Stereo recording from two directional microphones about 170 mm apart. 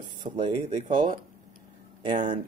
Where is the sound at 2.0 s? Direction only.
30° right (ahead or behind).